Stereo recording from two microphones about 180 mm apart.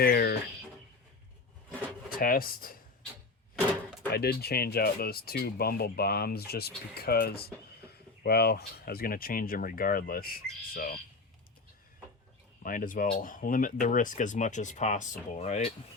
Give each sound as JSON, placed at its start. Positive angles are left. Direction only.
{"t": 0.0, "sound": "a sound", "side_deg": 55}
{"t": 2.0, "sound": "speech", "side_deg": 55}
{"t": 4.1, "sound": "speech", "side_deg": 60}
{"t": 12.6, "sound": "speech", "side_deg": 50}